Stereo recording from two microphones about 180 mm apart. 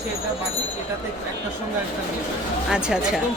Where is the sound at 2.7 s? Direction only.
5° right (ahead or behind).